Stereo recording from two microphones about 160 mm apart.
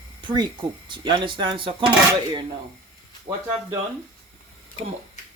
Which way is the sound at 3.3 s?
30° right (ahead or behind).